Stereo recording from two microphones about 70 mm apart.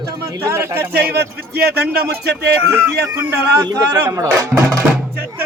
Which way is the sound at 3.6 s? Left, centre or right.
Right.